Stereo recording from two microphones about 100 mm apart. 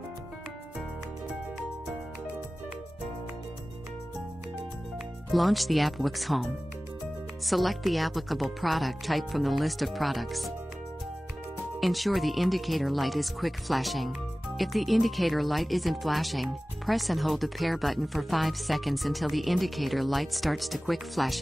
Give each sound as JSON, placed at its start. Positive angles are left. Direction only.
{"t": 5.3, "sound": "speech", "side_deg": 0}
{"t": 11.8, "sound": "speech", "side_deg": 0}